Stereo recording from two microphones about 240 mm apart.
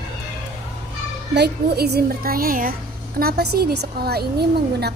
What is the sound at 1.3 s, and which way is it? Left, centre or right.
A woman's voice, right.